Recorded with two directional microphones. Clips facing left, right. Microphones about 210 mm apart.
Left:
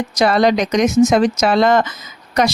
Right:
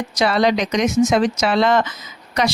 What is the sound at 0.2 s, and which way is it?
Speech, 45° left (ahead or behind).